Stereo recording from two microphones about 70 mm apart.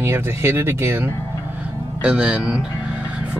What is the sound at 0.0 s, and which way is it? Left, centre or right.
Speech, right.